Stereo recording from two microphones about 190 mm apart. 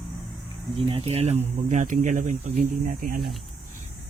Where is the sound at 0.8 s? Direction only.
30° right (ahead or behind); by 3.1 s 45° right (ahead or behind).